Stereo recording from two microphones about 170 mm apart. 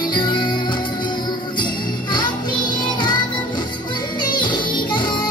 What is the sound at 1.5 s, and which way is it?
Jingle bell, 25° left (ahead or behind).